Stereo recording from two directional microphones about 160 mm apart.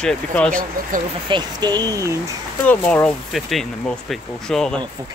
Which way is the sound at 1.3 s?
25° right (ahead or behind).